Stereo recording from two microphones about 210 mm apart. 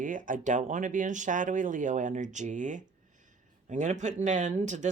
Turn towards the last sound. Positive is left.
turn(degrees=-35)  # may be behind; listen again after turning